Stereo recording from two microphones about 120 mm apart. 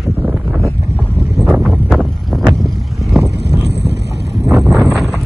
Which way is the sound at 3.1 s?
Centre (ahead or behind).